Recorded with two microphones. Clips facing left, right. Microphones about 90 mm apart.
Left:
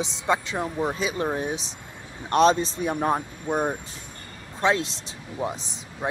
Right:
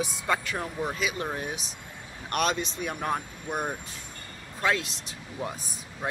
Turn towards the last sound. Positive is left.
turn(degrees=25)  # may be behind; listen again after turning